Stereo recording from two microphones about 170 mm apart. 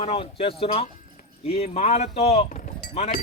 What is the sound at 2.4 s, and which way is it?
Speech, 55° left (ahead or behind).